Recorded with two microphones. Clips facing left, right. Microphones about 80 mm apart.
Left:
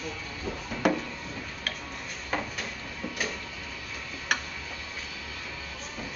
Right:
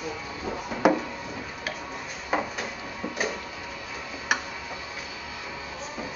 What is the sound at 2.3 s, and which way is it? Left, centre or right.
Drawer open or close, centre.